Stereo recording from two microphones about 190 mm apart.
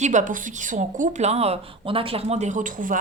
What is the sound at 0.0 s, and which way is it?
Speech, 40° right (ahead or behind).